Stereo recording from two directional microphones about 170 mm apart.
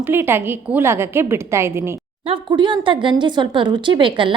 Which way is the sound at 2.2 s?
30° right (ahead or behind).